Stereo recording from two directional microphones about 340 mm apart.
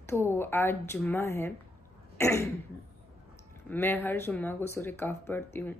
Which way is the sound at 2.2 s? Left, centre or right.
Centre.